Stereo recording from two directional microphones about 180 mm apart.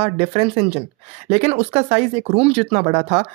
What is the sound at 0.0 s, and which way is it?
Speech, 35° right (ahead or behind).